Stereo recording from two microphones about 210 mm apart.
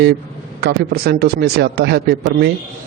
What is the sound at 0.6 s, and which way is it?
A man's voice, 50° right (ahead or behind).